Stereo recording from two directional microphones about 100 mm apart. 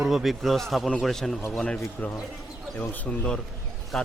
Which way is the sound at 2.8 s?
15° left (ahead or behind).